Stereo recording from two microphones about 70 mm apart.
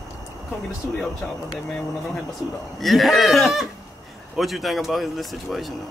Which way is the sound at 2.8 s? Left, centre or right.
Centre.